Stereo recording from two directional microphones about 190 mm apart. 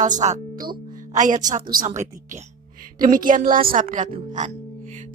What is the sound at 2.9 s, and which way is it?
Speech, 45° right (ahead or behind).